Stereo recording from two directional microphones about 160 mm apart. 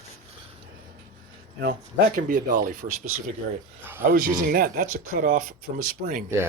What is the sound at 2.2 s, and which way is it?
Speech, 60° right (ahead or behind).